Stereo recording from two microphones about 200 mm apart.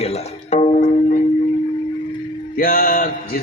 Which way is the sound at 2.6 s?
45° left (ahead or behind).